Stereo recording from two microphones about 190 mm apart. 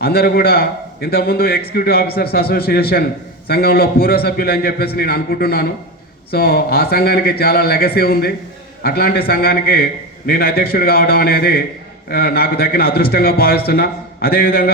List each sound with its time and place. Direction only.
0.0 s a man's voice: 55° left (ahead or behind)